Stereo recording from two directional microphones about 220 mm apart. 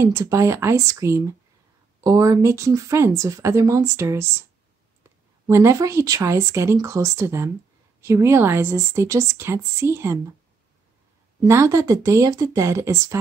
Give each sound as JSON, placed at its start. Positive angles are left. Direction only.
{"t": 0.0, "sound": "speech", "side_deg": -15}
{"t": 5.5, "sound": "speech", "side_deg": -15}
{"t": 11.4, "sound": "speech", "side_deg": -10}